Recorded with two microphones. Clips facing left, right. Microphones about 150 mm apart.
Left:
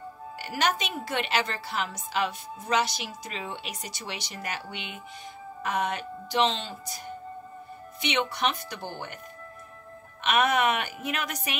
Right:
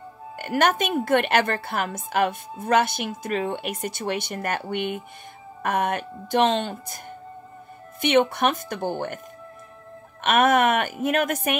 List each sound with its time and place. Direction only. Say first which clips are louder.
0.4 s speech: right 7 dB; 55° right (ahead or behind)
8.0 s a woman's voice: right 8 dB; 50° right (ahead or behind)
10.2 s a woman's voice: right 5 dB; 50° right (ahead or behind)